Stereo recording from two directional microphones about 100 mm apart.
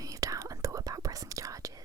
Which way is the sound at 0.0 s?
35° right (ahead or behind).